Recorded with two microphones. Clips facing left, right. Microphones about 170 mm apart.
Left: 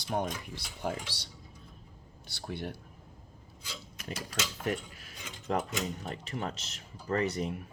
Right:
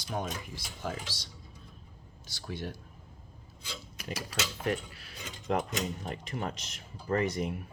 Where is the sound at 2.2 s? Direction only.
55° left (ahead or behind).